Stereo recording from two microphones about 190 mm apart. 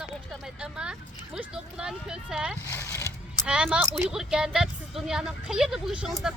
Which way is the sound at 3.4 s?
5° right (ahead or behind).